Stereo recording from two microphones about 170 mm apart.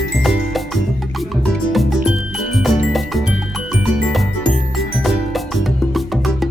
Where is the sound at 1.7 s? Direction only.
Centre (ahead or behind).